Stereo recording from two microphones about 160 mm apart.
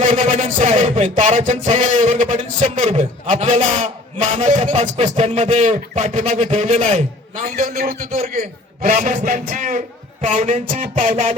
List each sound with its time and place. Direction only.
0.2 s a man's voice: 50° right (ahead or behind)